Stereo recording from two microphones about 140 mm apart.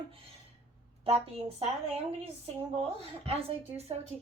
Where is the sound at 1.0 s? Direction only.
45° right (ahead or behind).